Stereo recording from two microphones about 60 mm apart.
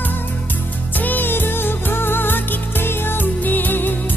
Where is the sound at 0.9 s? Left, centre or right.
Left.